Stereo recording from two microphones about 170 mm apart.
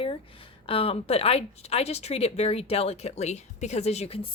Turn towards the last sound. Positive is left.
turn(degrees=35)  # may be behind; listen again after turning